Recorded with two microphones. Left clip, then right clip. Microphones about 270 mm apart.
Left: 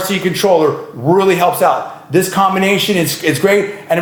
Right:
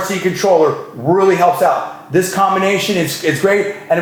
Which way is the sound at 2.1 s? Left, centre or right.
Left.